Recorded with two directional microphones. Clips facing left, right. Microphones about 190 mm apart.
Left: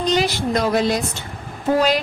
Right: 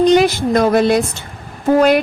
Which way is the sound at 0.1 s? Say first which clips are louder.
Right 7 dB; 55° right (ahead or behind).